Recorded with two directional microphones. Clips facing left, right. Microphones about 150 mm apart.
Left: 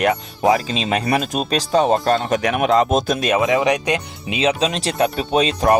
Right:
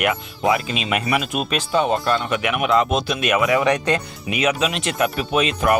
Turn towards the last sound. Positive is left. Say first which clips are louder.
# left 3 dB
turn(degrees=30)  # may be behind; listen again after turning